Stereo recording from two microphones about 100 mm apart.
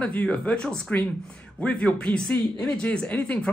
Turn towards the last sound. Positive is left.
turn(degrees=15)  # may be behind; listen again after turning